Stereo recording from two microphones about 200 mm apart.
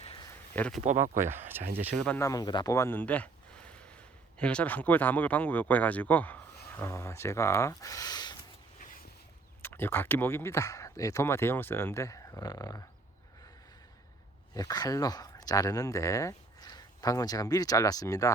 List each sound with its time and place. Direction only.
0.0 s a sound: 30° left (ahead or behind)
0.5 s speech: 5° left (ahead or behind)
0.9 s speech: 40° right (ahead or behind)
1.1 s speech: 10° right (ahead or behind)
2.0 s speech: 10° left (ahead or behind)
4.4 s speech: 5° left (ahead or behind)
9.6 s speech: 10° left (ahead or behind)
14.5 s speech: 20° left (ahead or behind)